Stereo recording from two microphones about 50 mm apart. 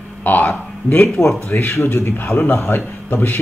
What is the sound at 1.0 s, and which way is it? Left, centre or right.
A man's voice, left.